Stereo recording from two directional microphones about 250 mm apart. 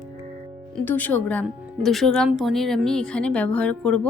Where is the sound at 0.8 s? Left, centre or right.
Centre.